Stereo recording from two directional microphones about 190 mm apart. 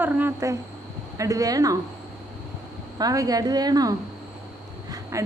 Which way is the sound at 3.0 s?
20° right (ahead or behind).